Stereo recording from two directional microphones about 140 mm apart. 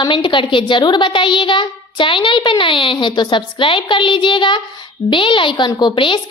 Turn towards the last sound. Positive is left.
turn(degrees=35)  # may be behind; listen again after turning